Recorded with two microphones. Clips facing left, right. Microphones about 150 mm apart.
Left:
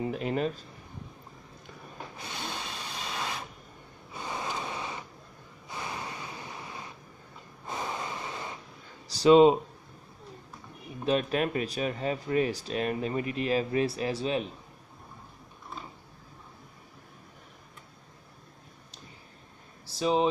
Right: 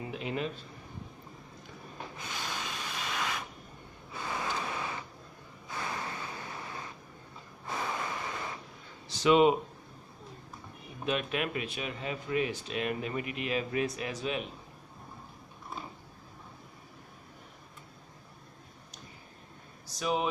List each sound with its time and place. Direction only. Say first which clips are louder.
0.0 s speech: left 5 dB; 40° left (ahead or behind)
2.4 s vehicle: left 1 dB; 30° left (ahead or behind)
4.1 s a sound: even; 20° left (ahead or behind)
7.6 s snort: even; 20° left (ahead or behind)
9.0 s speech: left 5 dB; 35° left (ahead or behind)
11.1 s speech: left 5 dB; 35° left (ahead or behind)
19.9 s speech: left 5 dB; 30° left (ahead or behind)